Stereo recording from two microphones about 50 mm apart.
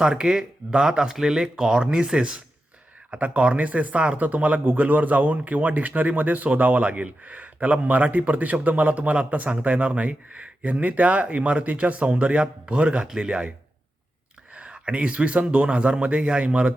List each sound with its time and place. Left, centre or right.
0.0 s speech: centre
14.5 s speech: right